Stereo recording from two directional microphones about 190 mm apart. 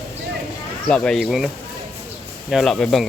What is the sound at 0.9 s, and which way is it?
Speech, 5° left (ahead or behind).